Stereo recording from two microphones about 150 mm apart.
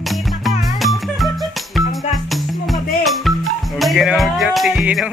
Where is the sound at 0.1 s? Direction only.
Centre (ahead or behind).